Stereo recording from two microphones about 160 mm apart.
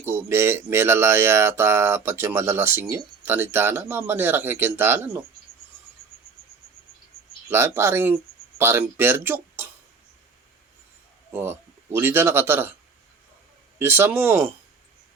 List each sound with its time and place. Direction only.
0.0 s speech: 15° right (ahead or behind)
7.5 s speech: 15° right (ahead or behind)
11.3 s speech: 15° right (ahead or behind)
13.7 s speech: 15° right (ahead or behind)